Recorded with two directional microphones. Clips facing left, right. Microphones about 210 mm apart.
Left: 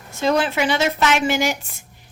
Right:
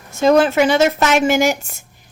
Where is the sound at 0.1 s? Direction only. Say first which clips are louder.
Right 7 dB; 45° right (ahead or behind).